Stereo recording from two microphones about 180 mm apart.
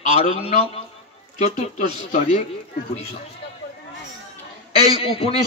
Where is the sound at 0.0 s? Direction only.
40° left (ahead or behind).